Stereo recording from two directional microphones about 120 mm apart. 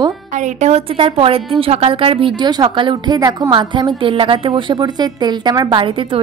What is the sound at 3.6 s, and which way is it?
A woman's voice, 40° right (ahead or behind).